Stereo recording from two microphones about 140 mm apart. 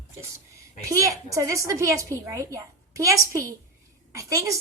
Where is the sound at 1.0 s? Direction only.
20° right (ahead or behind).